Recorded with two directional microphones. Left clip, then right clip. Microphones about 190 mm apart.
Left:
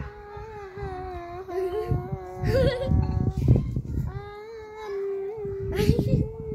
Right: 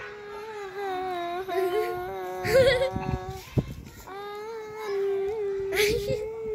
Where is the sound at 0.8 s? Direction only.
5° right (ahead or behind).